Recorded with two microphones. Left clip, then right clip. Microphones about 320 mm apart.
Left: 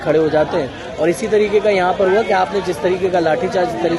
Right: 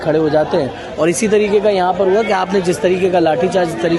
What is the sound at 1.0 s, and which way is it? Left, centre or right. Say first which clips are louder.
Speech: right 1 dB; right.